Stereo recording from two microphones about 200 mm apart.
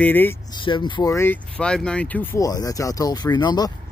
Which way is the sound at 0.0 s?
10° left (ahead or behind).